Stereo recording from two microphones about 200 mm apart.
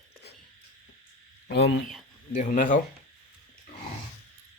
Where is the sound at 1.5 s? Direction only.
60° left (ahead or behind).